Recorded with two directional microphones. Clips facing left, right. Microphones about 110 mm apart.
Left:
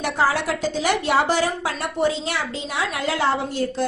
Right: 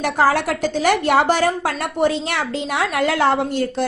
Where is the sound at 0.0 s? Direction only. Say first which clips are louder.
Right 4 dB; 55° right (ahead or behind).